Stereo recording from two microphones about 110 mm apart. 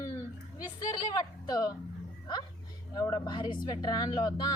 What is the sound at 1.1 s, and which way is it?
Speech, 35° left (ahead or behind).